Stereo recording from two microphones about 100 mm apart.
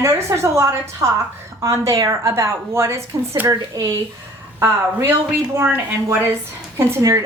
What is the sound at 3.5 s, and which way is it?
Speech, 35° right (ahead or behind).